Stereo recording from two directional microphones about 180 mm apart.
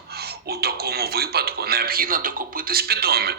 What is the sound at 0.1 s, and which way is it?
A man's voice, 60° right (ahead or behind).